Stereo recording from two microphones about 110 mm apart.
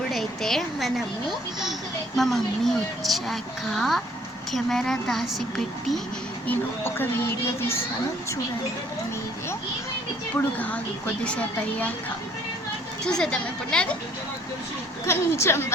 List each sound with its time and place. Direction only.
0.1 s a woman's voice: 5° left (ahead or behind)
6.5 s speech: 20° left (ahead or behind)
10.3 s a woman's voice: 15° left (ahead or behind)
13.1 s a woman's voice: 5° left (ahead or behind)
15.0 s speech: 25° left (ahead or behind)